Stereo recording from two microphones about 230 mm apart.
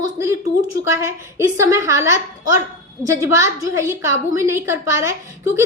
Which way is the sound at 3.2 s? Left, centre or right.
Centre.